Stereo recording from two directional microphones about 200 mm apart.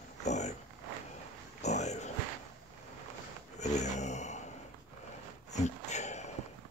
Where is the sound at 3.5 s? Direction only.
35° left (ahead or behind).